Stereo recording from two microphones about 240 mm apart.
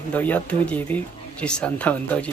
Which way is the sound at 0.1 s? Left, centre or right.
Centre.